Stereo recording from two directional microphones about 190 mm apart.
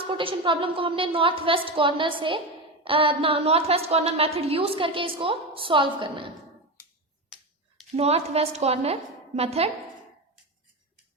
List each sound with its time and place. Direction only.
0.1 s a woman's voice: 25° right (ahead or behind)
7.3 s computer keyboard: 5° right (ahead or behind)
7.9 s a woman's voice: 35° right (ahead or behind)